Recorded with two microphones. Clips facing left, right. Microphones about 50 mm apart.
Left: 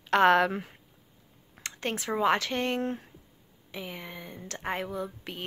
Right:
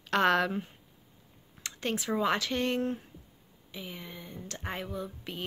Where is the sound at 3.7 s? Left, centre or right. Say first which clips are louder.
Left 3 dB; left.